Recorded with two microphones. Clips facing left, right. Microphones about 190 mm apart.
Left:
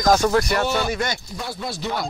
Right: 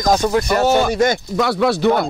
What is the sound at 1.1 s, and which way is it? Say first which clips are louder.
Speech: right 14 dB; 75° right (ahead or behind).